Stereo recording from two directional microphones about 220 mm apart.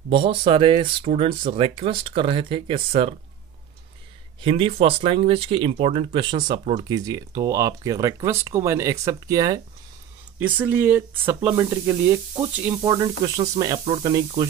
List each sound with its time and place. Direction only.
0.1 s speech: 25° right (ahead or behind)
4.4 s speech: 25° right (ahead or behind)